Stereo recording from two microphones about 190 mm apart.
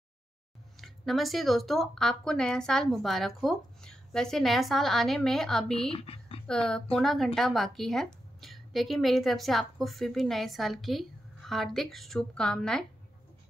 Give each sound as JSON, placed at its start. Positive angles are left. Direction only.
{"t": 0.7, "sound": "a woman's voice", "side_deg": 0}
{"t": 5.8, "sound": "speech", "side_deg": 30}
{"t": 6.4, "sound": "a woman's voice", "side_deg": 5}